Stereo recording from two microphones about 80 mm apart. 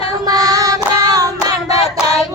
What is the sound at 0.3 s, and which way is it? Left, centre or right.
Child singing, right.